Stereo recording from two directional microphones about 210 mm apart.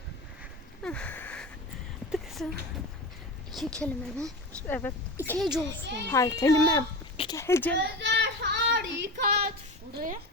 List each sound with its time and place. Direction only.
0.8 s a sound: 5° left (ahead or behind)
3.8 s a woman's voice: 5° left (ahead or behind)
7.8 s child singing: 55° right (ahead or behind)
9.9 s a woman's voice: 40° right (ahead or behind)